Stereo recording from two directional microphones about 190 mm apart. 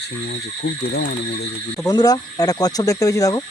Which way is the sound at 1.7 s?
20° left (ahead or behind).